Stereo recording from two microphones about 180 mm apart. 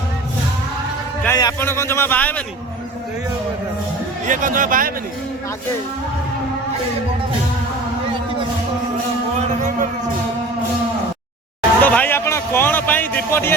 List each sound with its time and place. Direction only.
1.2 s a man's voice: 15° left (ahead or behind)
4.3 s speech: 45° right (ahead or behind)
9.5 s speech: 45° right (ahead or behind)
11.8 s a sound: 10° left (ahead or behind)